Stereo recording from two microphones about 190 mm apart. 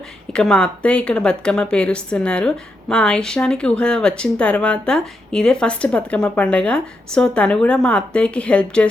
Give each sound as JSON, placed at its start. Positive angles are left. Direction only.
{"t": 0.3, "sound": "speech", "side_deg": 5}